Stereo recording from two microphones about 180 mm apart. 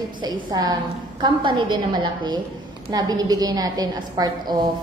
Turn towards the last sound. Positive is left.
turn(degrees=-25)  # may be behind; listen again after turning